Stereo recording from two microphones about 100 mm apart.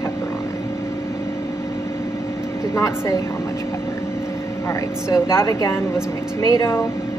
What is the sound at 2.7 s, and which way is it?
Speech, 35° left (ahead or behind).